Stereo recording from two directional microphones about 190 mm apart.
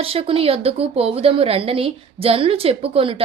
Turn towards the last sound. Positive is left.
turn(degrees=-30)  # may be behind; listen again after turning